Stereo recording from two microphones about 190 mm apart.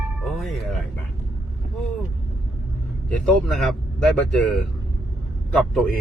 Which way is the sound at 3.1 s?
Centre (ahead or behind).